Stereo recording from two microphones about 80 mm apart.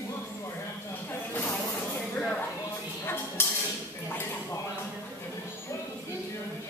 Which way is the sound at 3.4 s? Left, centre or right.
Left.